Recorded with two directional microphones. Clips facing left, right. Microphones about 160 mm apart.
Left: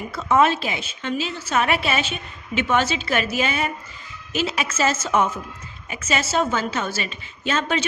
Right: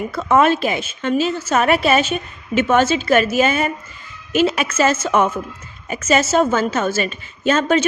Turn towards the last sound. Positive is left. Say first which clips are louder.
# right 7 dB
turn(degrees=-45)  # may be behind; listen again after turning